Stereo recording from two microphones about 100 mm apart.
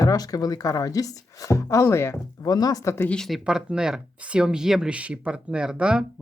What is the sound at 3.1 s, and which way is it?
Speech, 5° left (ahead or behind).